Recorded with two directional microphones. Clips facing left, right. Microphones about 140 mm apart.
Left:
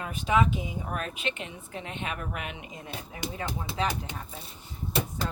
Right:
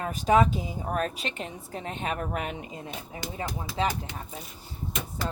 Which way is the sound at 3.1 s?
20° left (ahead or behind).